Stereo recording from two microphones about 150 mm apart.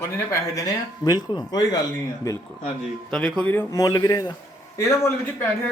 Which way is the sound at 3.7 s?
25° left (ahead or behind).